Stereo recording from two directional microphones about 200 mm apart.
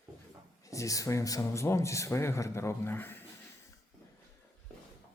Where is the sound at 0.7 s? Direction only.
15° left (ahead or behind).